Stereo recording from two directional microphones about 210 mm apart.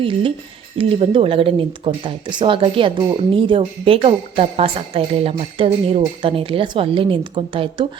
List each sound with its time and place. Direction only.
0.0 s speech: 25° right (ahead or behind)